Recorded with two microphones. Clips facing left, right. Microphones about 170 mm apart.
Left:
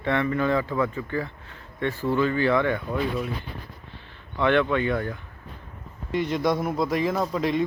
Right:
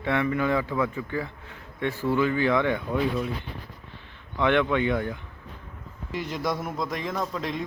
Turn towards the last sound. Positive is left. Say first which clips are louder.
# left 5 dB
turn(degrees=0)  # may be behind; listen again after turning